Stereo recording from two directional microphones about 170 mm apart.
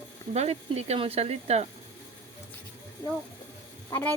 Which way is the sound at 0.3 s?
40° right (ahead or behind).